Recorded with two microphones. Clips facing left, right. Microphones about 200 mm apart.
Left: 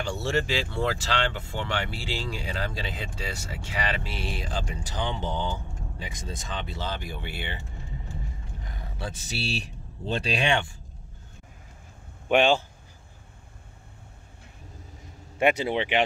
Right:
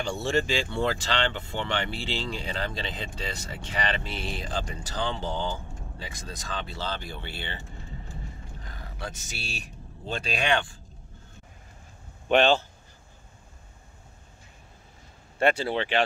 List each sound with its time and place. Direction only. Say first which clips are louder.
0.0 s speech: right 1 dB; 5° left (ahead or behind)
8.6 s speech: left 2 dB; 20° left (ahead or behind)
12.3 s speech: even; 10° left (ahead or behind)
15.3 s speech: left 1 dB; 15° left (ahead or behind)